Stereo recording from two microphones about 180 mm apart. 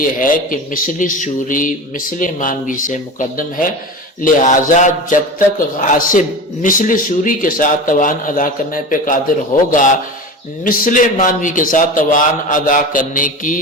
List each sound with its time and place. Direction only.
0.0 s a man's voice: 50° left (ahead or behind)